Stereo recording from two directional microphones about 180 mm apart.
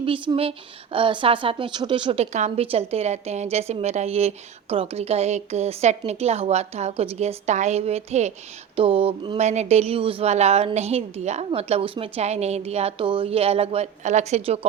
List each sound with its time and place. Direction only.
0.0 s a woman's voice: 30° right (ahead or behind)
9.4 s a woman's voice: 40° right (ahead or behind)